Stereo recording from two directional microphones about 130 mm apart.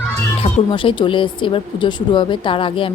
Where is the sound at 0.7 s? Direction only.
40° left (ahead or behind).